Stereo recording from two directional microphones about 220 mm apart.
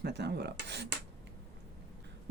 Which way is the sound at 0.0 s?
50° right (ahead or behind).